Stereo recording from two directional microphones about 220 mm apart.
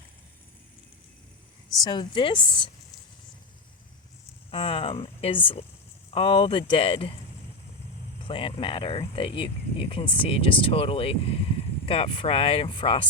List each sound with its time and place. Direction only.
1.8 s speech: 20° left (ahead or behind)
4.5 s speech: 25° left (ahead or behind)
8.3 s speech: 25° left (ahead or behind)